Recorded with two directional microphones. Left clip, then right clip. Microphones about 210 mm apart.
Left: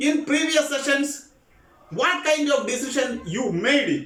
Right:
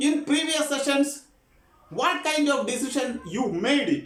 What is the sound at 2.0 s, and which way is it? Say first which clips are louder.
A man's voice: left 3 dB; 15° right (ahead or behind).